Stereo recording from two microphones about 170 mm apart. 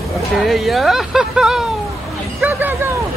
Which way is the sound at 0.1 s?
Centre (ahead or behind).